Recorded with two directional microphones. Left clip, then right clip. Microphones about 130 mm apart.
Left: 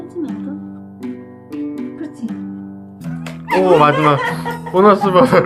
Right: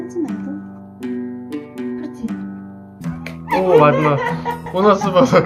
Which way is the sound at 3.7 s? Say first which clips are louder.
Right 1 dB; 30° left (ahead or behind).